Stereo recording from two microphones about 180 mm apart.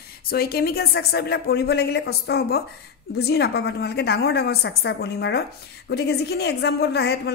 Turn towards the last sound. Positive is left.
turn(degrees=65)  # may be behind; listen again after turning